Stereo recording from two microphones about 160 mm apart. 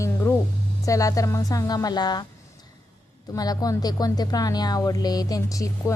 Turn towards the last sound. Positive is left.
turn(degrees=20)  # may be behind; listen again after turning